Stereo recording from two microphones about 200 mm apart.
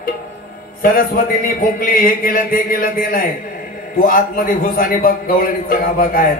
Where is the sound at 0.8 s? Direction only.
45° left (ahead or behind).